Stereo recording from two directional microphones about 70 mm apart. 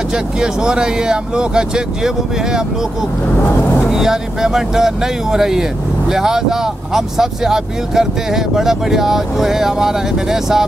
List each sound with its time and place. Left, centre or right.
0.1 s speech: centre
3.6 s speech: left
3.9 s speech: centre